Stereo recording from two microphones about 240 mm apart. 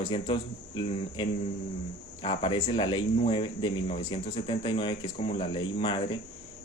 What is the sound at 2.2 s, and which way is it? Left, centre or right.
Speech, left.